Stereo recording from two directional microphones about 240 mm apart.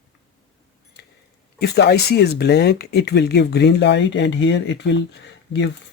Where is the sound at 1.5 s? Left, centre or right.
Left.